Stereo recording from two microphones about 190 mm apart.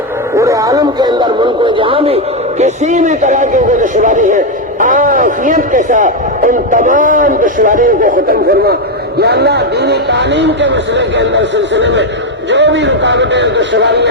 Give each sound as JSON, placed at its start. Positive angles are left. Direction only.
{"t": 0.3, "sound": "a man's voice", "side_deg": -15}